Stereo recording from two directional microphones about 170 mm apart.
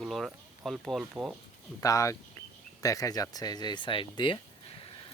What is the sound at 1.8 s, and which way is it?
Speech, 20° left (ahead or behind).